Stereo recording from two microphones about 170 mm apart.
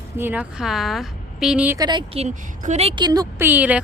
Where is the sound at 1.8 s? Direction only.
25° right (ahead or behind); by 2.9 s 45° right (ahead or behind).